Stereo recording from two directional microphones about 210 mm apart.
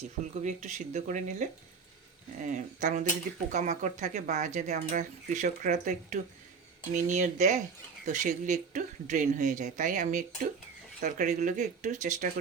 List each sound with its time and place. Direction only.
0.4 s speech: 35° right (ahead or behind)